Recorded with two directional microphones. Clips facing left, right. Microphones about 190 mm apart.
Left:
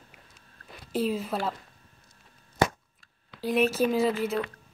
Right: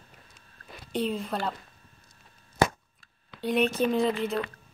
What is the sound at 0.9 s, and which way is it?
Speech, 5° left (ahead or behind).